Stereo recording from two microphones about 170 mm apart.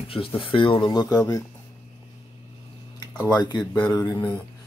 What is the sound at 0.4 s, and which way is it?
Speech, 30° left (ahead or behind).